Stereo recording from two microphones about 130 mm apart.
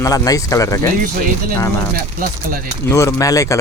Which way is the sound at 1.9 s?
90° right.